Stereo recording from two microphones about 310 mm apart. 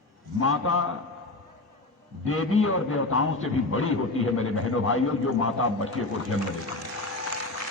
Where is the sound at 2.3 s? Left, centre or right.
Left.